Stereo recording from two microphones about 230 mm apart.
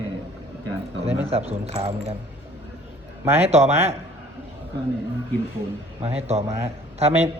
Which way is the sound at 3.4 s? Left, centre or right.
Right.